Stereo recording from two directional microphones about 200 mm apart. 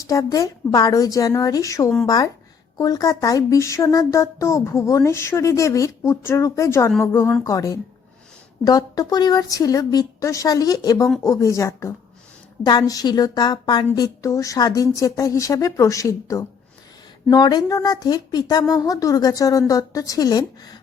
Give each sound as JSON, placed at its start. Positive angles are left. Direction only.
{"t": 0.0, "sound": "a woman's voice", "side_deg": 15}